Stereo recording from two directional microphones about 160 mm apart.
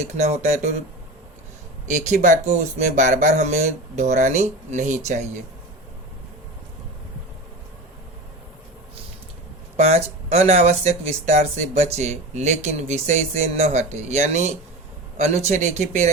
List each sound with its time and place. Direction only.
0.2 s speech: 45° right (ahead or behind)
1.9 s speech: 50° right (ahead or behind)
9.7 s speech: 40° right (ahead or behind)